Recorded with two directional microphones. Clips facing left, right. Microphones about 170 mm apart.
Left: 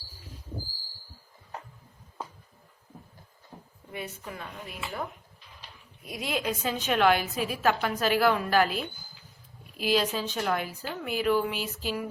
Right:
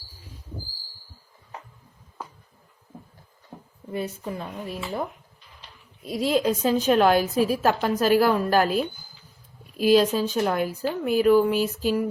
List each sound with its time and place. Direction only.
3.9 s a woman's voice: 35° right (ahead or behind)
6.1 s a woman's voice: 35° right (ahead or behind)